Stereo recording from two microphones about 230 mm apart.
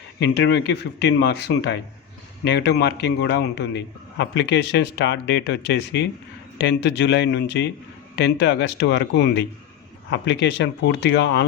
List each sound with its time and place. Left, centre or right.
0.2 s a man's voice: left